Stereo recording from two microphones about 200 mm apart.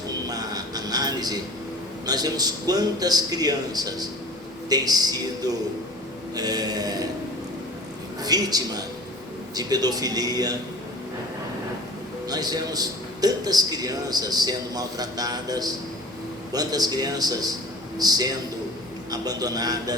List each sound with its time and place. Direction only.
0.3 s a sound: 20° right (ahead or behind)
2.0 s a man's voice: 20° right (ahead or behind)
8.2 s a man's voice: 20° right (ahead or behind)
12.3 s a man's voice: 20° right (ahead or behind)